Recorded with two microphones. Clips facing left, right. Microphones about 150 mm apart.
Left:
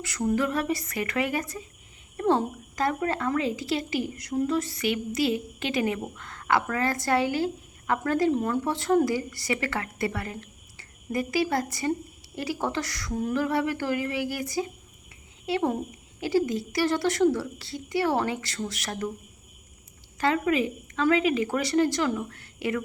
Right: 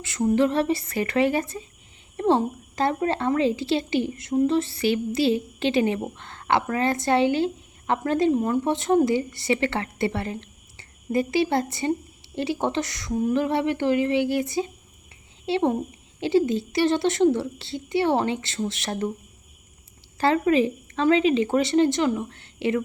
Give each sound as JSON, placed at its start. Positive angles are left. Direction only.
{"t": 0.0, "sound": "speech", "side_deg": -20}
{"t": 20.1, "sound": "speech", "side_deg": -30}